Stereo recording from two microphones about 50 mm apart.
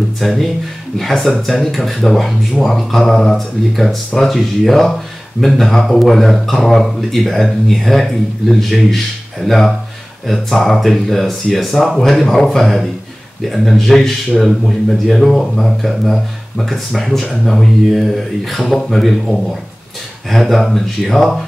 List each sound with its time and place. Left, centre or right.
0.2 s speech: centre